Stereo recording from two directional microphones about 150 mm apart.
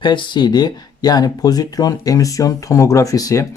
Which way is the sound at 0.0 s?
30° left (ahead or behind).